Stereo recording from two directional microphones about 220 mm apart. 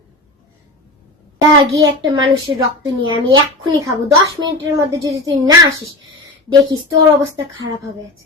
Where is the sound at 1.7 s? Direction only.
15° right (ahead or behind).